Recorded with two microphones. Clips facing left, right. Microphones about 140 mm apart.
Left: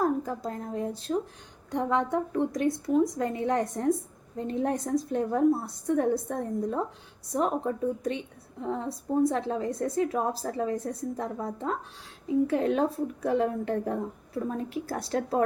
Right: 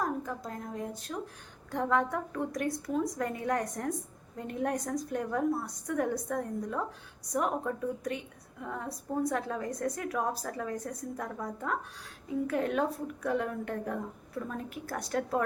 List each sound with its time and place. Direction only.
0.0 s a woman's voice: 35° left (ahead or behind)